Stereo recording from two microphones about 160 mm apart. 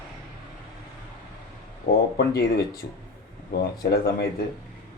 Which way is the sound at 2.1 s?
90° left.